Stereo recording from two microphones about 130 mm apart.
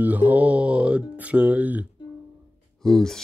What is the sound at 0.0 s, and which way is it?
Music, 15° right (ahead or behind).